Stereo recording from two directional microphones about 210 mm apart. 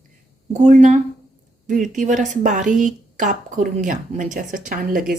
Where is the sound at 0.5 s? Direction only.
35° right (ahead or behind).